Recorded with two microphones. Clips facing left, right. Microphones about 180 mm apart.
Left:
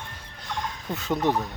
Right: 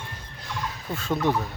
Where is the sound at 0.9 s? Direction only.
20° left (ahead or behind).